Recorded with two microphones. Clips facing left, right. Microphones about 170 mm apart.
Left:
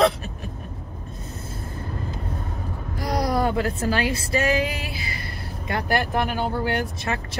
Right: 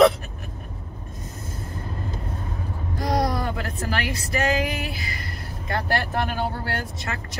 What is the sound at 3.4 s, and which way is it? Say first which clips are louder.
Music: left 6 dB; 25° left (ahead or behind).